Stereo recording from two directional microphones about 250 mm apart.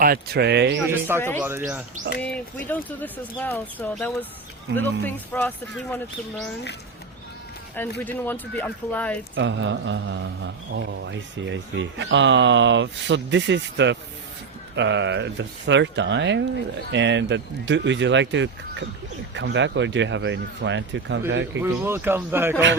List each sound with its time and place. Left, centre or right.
0.0 s speech: right
0.9 s speech: centre
1.2 s speech: centre
1.5 s speech: centre
2.6 s speech: centre
8.0 s speech: centre
9.3 s speech: right
21.6 s speech: centre